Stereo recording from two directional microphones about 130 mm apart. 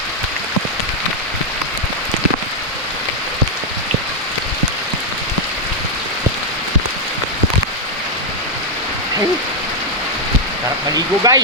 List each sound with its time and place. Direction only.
10.9 s speech: 30° right (ahead or behind)